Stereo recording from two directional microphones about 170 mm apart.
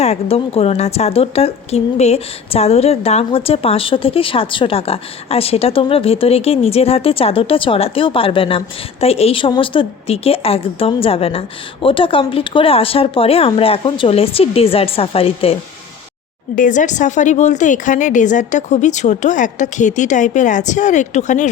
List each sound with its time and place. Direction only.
0.0 s a woman's voice: 35° left (ahead or behind)
16.6 s a woman's voice: 50° left (ahead or behind)